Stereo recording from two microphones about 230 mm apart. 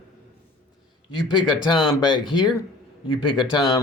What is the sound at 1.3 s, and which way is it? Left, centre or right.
Speech, centre.